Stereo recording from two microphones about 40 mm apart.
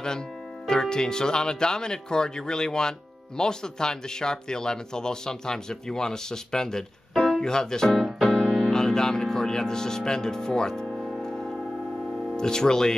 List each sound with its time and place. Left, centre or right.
0.7 s speech: centre
7.9 s keyboard: centre
8.6 s speech: centre
11.2 s a sound: centre
12.4 s speech: centre